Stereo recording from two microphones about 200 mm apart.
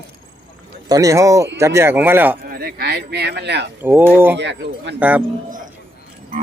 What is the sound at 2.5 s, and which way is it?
Speech, 50° right (ahead or behind).